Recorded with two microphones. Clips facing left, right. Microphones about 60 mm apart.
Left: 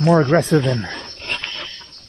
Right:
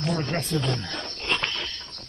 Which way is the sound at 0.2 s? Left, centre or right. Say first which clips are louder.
Left 12 dB; left.